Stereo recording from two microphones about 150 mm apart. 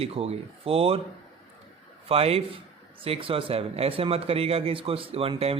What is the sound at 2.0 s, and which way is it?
A man's voice, 40° right (ahead or behind).